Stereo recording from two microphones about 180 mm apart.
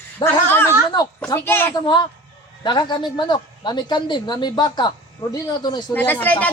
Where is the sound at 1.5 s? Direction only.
10° left (ahead or behind).